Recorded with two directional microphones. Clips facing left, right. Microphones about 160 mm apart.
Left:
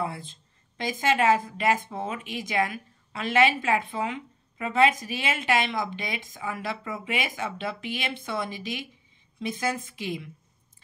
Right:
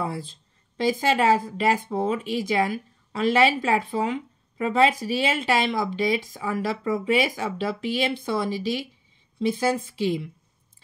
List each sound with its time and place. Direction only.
0.0 s speech: 35° right (ahead or behind)